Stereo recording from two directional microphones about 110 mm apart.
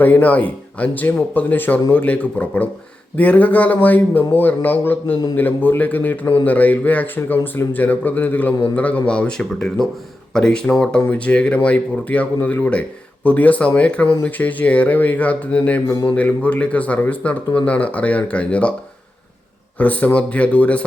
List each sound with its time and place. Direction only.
0.0 s speech: 15° left (ahead or behind)
19.8 s speech: 15° left (ahead or behind)